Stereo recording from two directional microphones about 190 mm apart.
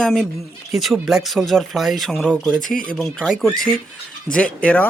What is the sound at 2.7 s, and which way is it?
Speech, 45° left (ahead or behind).